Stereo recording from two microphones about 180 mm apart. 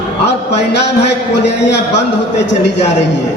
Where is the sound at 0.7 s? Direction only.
70° left (ahead or behind).